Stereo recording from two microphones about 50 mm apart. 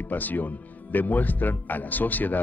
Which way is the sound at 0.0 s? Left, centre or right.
Left.